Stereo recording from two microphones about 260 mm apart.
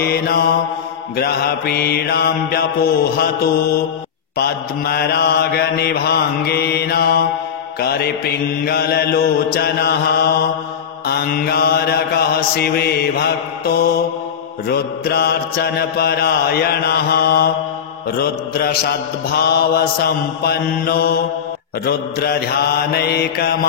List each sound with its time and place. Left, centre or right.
0.0 s mantra: left
8.6 s mantra: left
22.2 s mantra: left